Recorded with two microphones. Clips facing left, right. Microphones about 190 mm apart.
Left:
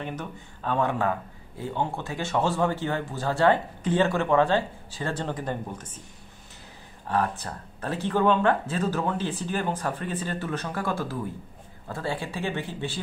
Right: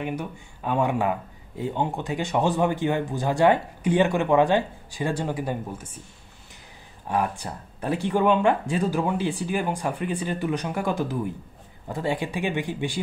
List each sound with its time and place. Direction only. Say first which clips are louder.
0.0 s speech: right 4 dB; 10° right (ahead or behind)
7.1 s speech: right 1 dB; 15° right (ahead or behind)